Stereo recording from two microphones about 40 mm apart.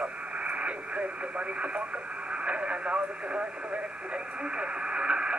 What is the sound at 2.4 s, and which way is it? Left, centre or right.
Speech, right.